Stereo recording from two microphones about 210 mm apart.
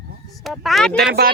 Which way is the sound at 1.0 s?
50° right (ahead or behind).